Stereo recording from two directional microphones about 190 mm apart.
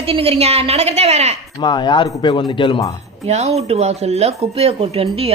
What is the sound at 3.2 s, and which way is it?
A woman's voice, 35° right (ahead or behind).